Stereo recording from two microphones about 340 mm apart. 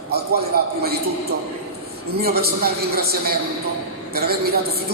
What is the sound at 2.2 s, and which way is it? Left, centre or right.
A man's voice, right.